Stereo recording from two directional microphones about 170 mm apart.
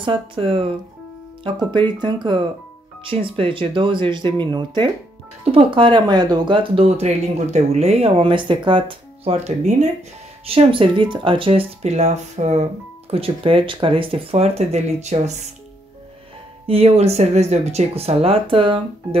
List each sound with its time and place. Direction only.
0.0 s speech: 30° right (ahead or behind)
16.6 s speech: 35° right (ahead or behind)